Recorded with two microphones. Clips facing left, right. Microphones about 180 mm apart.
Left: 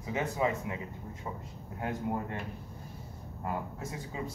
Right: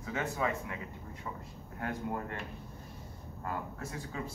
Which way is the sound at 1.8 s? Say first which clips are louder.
Left 3 dB; 20° left (ahead or behind).